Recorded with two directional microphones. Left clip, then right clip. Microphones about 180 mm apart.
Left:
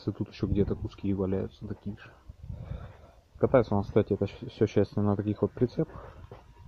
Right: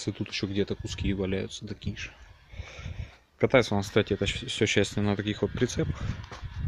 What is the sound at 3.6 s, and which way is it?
Speech, 15° right (ahead or behind).